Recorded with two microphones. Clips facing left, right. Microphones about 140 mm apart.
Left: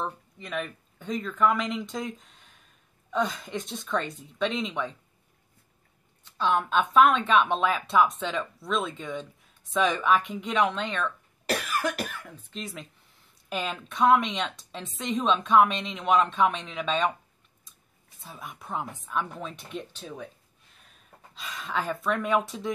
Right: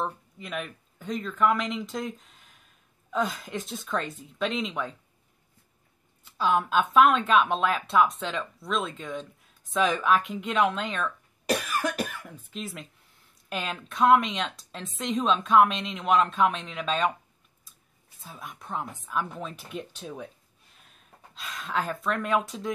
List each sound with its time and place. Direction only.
0.0 s speech: 5° right (ahead or behind)
6.2 s speech: 5° right (ahead or behind)
18.2 s speech: centre (ahead or behind)
21.4 s speech: centre (ahead or behind)